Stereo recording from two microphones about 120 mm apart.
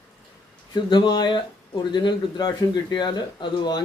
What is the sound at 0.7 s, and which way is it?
Speech, 40° left (ahead or behind).